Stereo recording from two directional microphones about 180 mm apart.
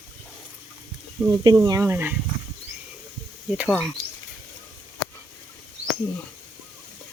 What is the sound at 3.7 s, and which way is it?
Speech, 5° left (ahead or behind).